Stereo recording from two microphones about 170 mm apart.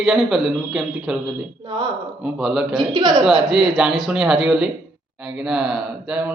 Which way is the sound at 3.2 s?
Centre (ahead or behind).